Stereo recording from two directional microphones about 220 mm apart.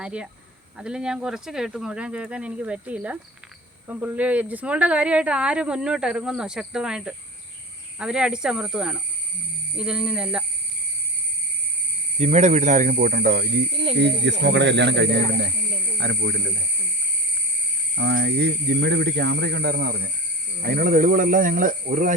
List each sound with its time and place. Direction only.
0.0 s speech: 5° right (ahead or behind)
12.2 s speech: 30° right (ahead or behind); by 16.4 s 50° right (ahead or behind)
17.9 s speech: 50° right (ahead or behind)